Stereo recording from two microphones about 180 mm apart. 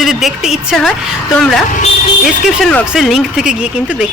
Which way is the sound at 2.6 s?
5° left (ahead or behind).